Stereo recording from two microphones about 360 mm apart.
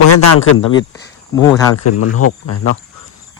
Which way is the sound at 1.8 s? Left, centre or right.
Left.